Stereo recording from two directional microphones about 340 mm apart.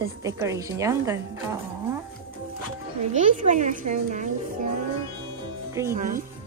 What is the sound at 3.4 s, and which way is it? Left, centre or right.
Speech, right.